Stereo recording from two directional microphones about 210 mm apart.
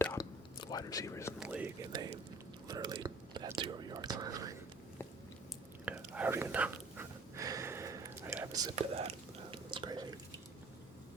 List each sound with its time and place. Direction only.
0.0 s whispering: 10° left (ahead or behind)
0.6 s speech: 20° left (ahead or behind)
1.4 s whispering: 5° right (ahead or behind)
2.6 s speech: 20° right (ahead or behind)
5.8 s whispering: 5° right (ahead or behind)
8.7 s whispering: 30° right (ahead or behind)